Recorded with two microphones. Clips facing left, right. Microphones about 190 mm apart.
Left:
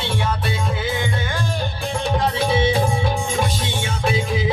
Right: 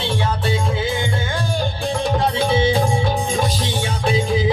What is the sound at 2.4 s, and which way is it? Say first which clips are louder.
Music: right 1 dB; 25° right (ahead or behind).